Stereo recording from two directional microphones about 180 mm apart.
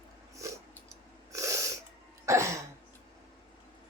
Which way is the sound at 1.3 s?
15° right (ahead or behind).